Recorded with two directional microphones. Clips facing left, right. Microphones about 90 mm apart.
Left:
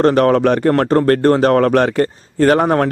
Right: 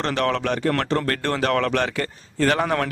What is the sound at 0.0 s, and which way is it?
A man's voice, 45° left (ahead or behind).